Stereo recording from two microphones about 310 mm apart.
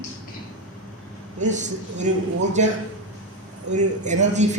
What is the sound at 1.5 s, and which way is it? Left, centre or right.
A woman's voice, right.